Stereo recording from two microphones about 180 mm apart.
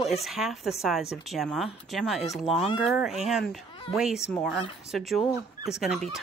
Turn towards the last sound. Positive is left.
turn(degrees=0)  # may be behind; listen again after turning